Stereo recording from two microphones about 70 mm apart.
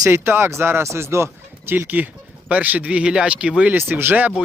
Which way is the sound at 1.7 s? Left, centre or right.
Right.